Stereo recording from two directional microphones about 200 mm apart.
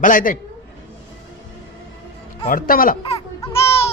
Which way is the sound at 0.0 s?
40° left (ahead or behind).